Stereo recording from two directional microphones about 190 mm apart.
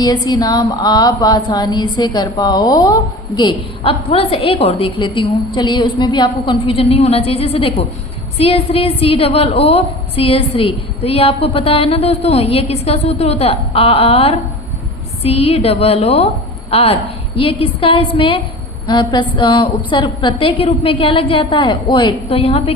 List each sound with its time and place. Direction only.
0.0 s a woman's voice: 20° left (ahead or behind)